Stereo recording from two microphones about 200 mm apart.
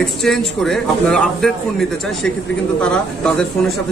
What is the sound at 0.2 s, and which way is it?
Speech, centre (ahead or behind).